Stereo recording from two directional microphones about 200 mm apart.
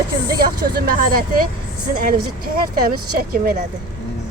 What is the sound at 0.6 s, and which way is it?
A woman's voice, 50° right (ahead or behind).